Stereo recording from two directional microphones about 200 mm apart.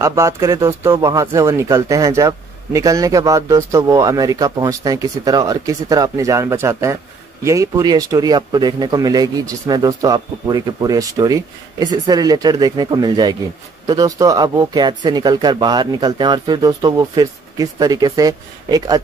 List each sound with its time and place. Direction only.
0.0 s speech: 15° right (ahead or behind)